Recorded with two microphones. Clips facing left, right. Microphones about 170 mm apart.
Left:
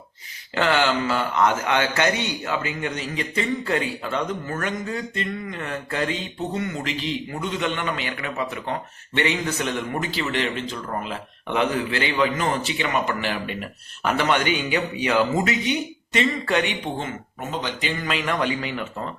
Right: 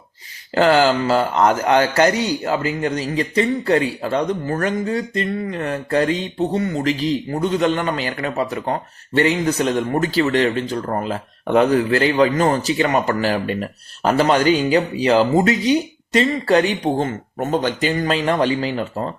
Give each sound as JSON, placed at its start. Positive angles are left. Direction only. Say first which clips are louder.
{"t": 0.5, "sound": "a man's voice", "louder": "right 7 dB", "side_deg": -35}